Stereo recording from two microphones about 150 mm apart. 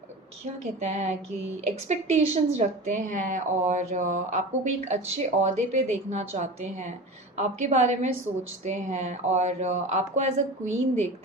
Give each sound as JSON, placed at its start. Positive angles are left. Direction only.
{"t": 0.8, "sound": "speech", "side_deg": -50}